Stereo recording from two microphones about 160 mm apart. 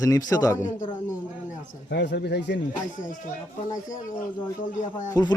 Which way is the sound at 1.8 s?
90° left.